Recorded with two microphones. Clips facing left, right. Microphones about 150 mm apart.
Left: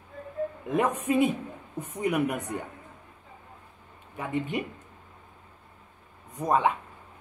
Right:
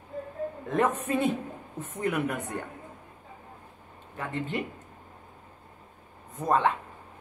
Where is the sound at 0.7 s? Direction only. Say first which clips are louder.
Left 2 dB; 10° left (ahead or behind).